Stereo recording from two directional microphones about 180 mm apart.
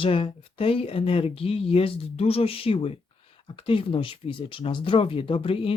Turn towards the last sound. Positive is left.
turn(degrees=30)  # may be behind; listen again after turning